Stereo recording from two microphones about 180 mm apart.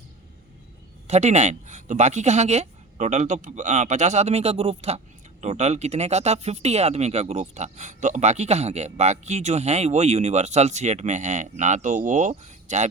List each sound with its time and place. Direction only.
1.0 s speech: 40° right (ahead or behind)